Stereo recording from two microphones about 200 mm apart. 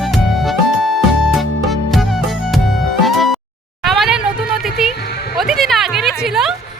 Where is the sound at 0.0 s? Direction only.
Centre (ahead or behind).